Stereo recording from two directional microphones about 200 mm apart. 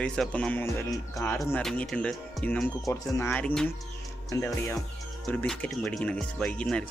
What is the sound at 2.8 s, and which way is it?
Speech, 15° left (ahead or behind).